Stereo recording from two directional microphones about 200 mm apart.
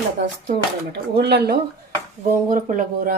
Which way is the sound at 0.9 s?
55° right (ahead or behind).